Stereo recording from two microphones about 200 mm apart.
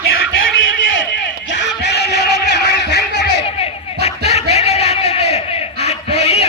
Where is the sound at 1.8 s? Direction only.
55° left (ahead or behind).